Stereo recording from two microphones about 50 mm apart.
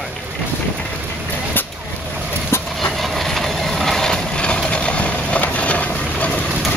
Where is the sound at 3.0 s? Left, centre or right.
Centre; by 6.3 s left.